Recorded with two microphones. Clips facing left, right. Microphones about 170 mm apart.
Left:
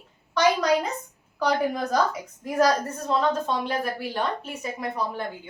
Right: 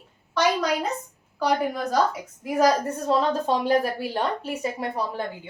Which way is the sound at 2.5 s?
10° right (ahead or behind).